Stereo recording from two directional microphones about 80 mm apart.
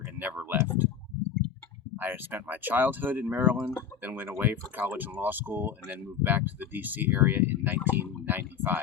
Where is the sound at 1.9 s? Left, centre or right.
Right.